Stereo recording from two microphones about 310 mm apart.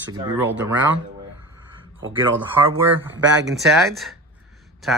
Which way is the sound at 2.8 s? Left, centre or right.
Centre.